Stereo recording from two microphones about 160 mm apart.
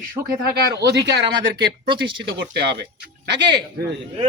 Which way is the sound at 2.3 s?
90° right.